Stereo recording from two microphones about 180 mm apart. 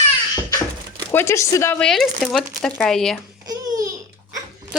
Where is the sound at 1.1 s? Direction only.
15° left (ahead or behind).